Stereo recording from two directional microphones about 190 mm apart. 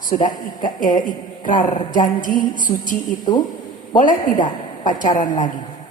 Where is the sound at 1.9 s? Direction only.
45° left (ahead or behind).